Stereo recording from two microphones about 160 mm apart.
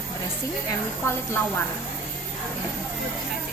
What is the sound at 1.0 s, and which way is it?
Speech, 15° left (ahead or behind).